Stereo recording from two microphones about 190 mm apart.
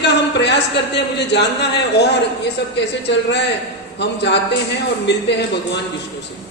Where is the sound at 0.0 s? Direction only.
65° left (ahead or behind).